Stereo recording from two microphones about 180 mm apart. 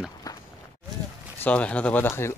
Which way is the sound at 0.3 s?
20° left (ahead or behind).